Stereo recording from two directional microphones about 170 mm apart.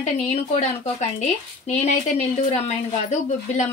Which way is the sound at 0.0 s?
45° left (ahead or behind).